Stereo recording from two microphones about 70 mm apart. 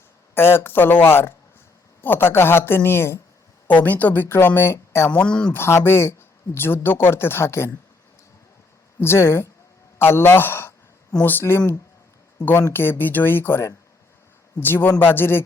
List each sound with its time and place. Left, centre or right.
0.3 s speech: left
3.8 s speech: left
5.1 s speech: centre
5.5 s speech: left
9.0 s speech: left
12.7 s speech: left